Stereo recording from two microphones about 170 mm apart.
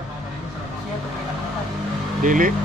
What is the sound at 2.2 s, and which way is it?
Speech, 50° right (ahead or behind).